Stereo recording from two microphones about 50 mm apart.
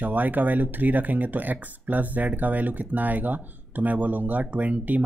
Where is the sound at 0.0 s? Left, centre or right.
Right.